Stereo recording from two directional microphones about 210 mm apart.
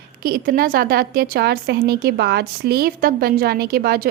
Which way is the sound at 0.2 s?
45° right (ahead or behind).